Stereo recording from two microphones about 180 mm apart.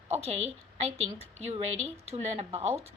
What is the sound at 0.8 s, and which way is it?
A woman's voice, 35° right (ahead or behind).